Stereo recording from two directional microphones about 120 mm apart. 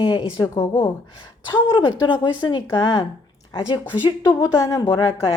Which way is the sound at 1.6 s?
40° left (ahead or behind).